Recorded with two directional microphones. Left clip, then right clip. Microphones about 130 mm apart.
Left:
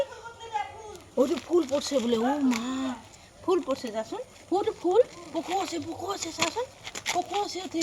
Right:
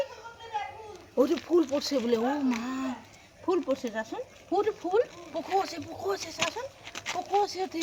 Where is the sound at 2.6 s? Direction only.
20° left (ahead or behind).